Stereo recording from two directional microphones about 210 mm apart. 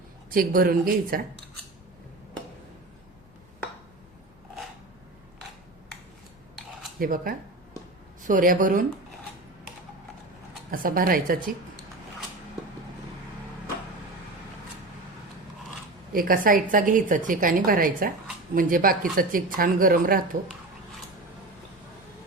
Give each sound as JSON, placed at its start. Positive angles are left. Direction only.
{"t": 0.3, "sound": "a woman's voice", "side_deg": -45}
{"t": 7.0, "sound": "a woman's voice", "side_deg": -45}
{"t": 10.7, "sound": "a woman's voice", "side_deg": -40}
{"t": 16.1, "sound": "a woman's voice", "side_deg": -45}